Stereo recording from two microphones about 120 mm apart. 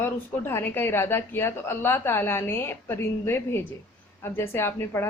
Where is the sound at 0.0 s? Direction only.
20° left (ahead or behind).